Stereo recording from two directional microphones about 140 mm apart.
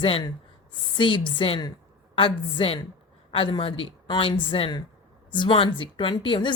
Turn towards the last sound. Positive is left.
turn(degrees=35)  # may be behind; listen again after turning